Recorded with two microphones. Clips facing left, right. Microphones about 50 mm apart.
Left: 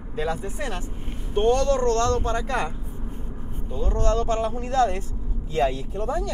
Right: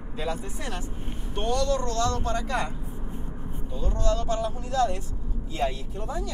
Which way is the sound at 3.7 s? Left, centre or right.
Left.